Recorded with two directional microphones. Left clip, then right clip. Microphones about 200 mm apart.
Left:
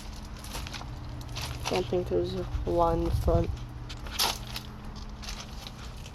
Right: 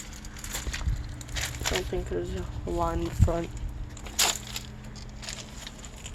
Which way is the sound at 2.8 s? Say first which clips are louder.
Left 4 dB; 10° left (ahead or behind).